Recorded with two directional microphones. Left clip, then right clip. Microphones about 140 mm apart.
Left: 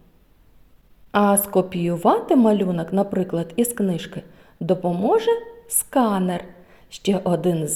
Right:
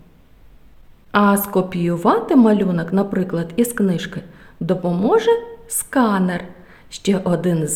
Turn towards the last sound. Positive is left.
turn(degrees=10)  # may be behind; listen again after turning